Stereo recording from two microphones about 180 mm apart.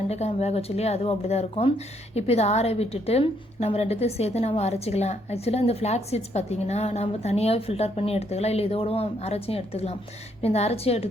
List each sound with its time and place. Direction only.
0.1 s a woman's voice: 35° left (ahead or behind)